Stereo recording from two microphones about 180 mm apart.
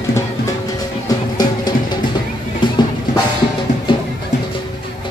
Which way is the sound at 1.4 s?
20° left (ahead or behind).